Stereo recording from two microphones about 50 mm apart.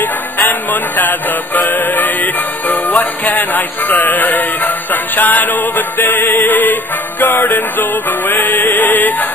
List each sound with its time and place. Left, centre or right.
0.0 s music: left
3.3 s speech: left